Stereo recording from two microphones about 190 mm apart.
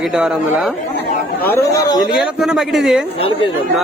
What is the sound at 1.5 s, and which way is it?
Speech, 15° left (ahead or behind).